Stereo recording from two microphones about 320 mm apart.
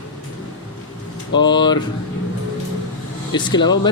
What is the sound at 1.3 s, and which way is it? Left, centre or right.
Speech, centre.